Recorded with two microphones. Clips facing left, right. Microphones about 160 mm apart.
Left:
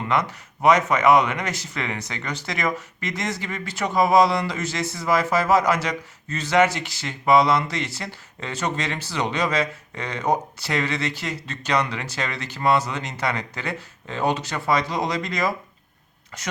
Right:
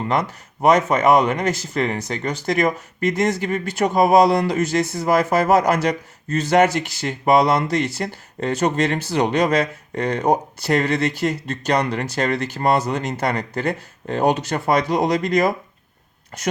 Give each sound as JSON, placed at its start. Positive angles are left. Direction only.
{"t": 0.0, "sound": "speech", "side_deg": -35}